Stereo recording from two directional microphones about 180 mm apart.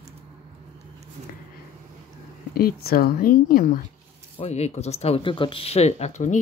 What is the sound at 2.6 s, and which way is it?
Speech, 55° left (ahead or behind).